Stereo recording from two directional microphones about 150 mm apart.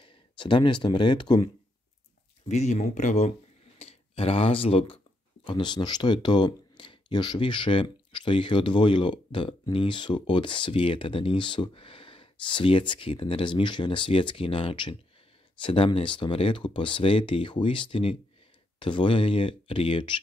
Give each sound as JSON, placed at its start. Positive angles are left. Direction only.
{"t": 0.0, "sound": "speech", "side_deg": 35}
{"t": 2.4, "sound": "speech", "side_deg": 50}